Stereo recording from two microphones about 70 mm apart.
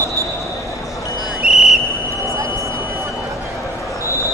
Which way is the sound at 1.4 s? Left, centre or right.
Centre.